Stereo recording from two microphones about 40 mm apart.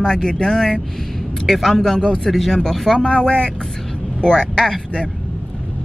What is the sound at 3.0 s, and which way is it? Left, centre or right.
Speech, left.